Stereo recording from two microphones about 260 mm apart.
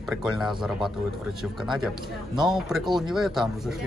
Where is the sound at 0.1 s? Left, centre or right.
Centre.